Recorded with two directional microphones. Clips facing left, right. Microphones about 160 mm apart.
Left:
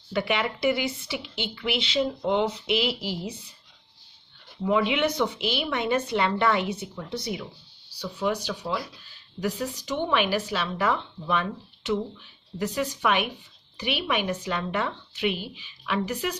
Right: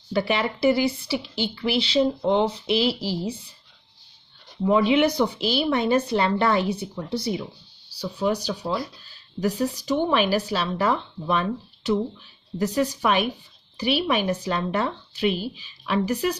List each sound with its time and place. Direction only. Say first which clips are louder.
0.1 s speech: right 3 dB; 35° right (ahead or behind)
4.6 s speech: right 5 dB; 35° right (ahead or behind)